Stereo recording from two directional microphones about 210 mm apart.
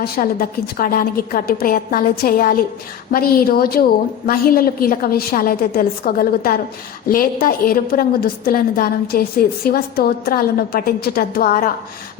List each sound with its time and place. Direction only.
0.0 s a woman's voice: 45° left (ahead or behind)